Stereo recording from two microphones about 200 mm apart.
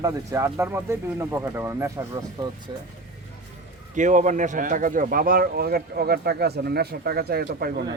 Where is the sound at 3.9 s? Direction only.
40° right (ahead or behind).